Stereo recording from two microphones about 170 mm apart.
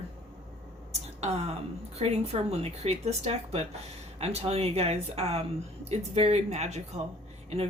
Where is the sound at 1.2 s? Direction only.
35° right (ahead or behind).